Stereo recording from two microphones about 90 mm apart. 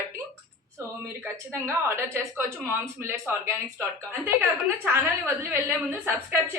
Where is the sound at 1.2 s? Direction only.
30° right (ahead or behind).